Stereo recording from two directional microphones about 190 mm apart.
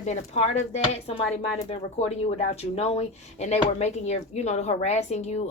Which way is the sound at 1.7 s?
35° left (ahead or behind).